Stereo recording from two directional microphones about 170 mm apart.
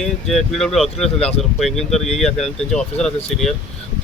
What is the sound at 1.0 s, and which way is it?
Speech, 35° left (ahead or behind).